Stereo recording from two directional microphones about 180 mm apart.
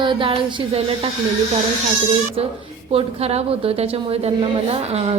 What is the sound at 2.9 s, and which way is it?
A woman's voice, 35° right (ahead or behind).